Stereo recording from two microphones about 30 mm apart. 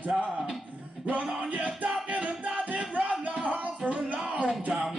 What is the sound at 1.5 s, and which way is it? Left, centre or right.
Music, right.